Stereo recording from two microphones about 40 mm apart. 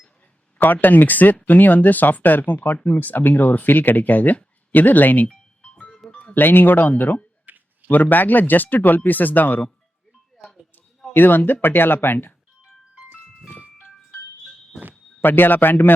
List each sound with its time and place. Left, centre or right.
0.6 s speech: left
6.1 s music: left
6.3 s speech: left
7.5 s a sound: right
7.9 s speech: left
10.3 s a sound: centre
11.1 s speech: left
15.2 s speech: left